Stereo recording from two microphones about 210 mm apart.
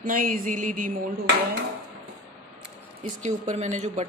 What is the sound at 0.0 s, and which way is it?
Speech, 40° right (ahead or behind).